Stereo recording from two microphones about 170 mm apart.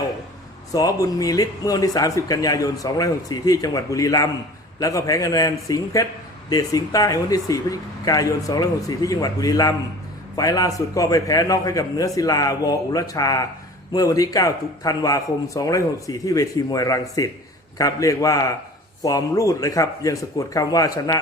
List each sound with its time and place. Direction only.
0.7 s speech: 20° left (ahead or behind)